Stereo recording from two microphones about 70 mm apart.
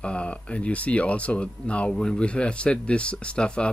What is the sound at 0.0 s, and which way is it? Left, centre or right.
Speech, centre.